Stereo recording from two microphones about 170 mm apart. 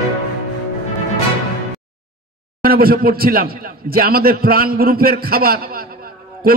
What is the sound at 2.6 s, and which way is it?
A man's voice, 60° right (ahead or behind).